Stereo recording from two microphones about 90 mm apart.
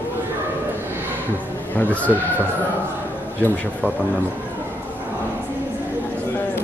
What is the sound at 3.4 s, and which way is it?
Speech, 15° left (ahead or behind).